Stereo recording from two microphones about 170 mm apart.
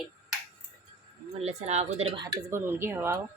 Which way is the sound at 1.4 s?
40° right (ahead or behind).